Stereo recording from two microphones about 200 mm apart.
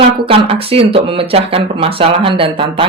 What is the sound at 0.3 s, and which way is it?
Speech, 30° right (ahead or behind).